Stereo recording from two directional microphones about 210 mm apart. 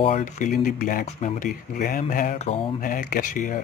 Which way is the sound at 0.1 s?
40° left (ahead or behind).